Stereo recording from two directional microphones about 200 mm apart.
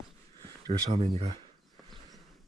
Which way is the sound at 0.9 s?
30° right (ahead or behind).